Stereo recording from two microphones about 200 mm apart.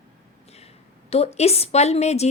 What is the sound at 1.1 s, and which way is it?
A woman's voice, 30° left (ahead or behind).